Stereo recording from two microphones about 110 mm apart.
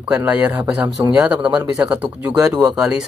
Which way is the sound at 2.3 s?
30° right (ahead or behind).